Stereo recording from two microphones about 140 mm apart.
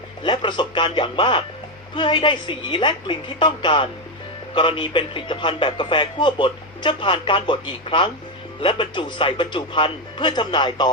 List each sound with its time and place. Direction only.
0.2 s a man's voice: 35° left (ahead or behind)